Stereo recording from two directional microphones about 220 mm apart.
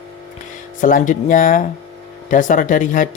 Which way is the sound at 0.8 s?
35° left (ahead or behind).